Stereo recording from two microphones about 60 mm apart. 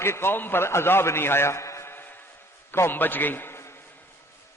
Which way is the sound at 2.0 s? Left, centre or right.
Left.